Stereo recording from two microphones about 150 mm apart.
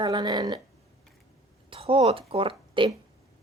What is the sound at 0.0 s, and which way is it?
Speech, 30° right (ahead or behind).